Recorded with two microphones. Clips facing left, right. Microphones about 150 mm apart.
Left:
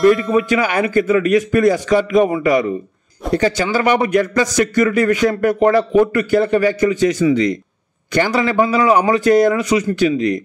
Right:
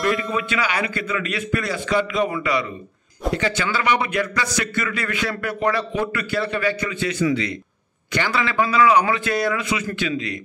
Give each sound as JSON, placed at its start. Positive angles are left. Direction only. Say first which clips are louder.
{"t": 0.5, "sound": "a man's voice", "louder": "left 7 dB", "side_deg": 50}